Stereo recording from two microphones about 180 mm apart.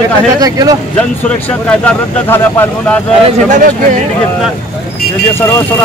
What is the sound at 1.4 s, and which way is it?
Speech, 10° left (ahead or behind).